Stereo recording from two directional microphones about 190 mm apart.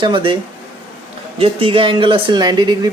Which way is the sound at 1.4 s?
30° right (ahead or behind).